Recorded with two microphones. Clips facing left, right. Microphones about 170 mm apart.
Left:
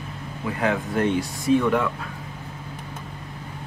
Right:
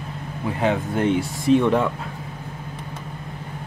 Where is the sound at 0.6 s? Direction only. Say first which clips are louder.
Right 2 dB; 25° right (ahead or behind).